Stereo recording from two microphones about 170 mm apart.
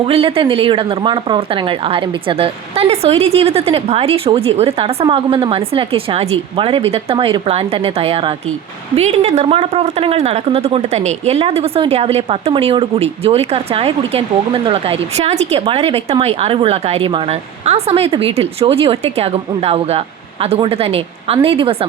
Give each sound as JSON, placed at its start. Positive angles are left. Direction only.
{"t": 0.0, "sound": "a woman's voice", "side_deg": -35}